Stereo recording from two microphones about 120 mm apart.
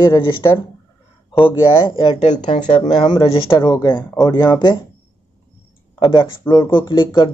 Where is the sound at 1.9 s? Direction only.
50° left (ahead or behind).